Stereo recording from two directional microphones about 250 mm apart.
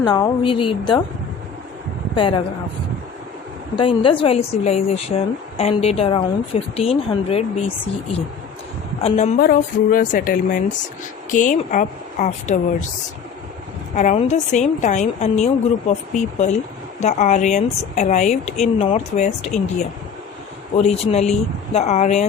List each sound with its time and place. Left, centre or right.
0.0 s a woman's voice: centre
2.1 s speech: centre
3.8 s speech: centre
9.0 s speech: left
13.9 s speech: left
20.7 s speech: left